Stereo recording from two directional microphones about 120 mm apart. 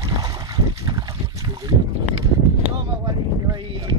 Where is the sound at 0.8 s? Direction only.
30° right (ahead or behind).